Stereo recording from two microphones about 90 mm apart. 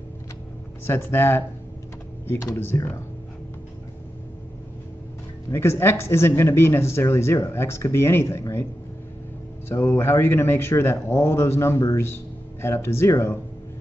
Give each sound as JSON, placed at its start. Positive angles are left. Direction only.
{"t": 0.8, "sound": "speech", "side_deg": 25}
{"t": 2.3, "sound": "speech", "side_deg": 40}
{"t": 2.6, "sound": "speech", "side_deg": 25}
{"t": 5.5, "sound": "speech", "side_deg": 30}
{"t": 9.7, "sound": "speech", "side_deg": 25}